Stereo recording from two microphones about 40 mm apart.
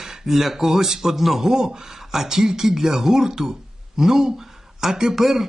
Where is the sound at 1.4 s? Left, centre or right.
Centre.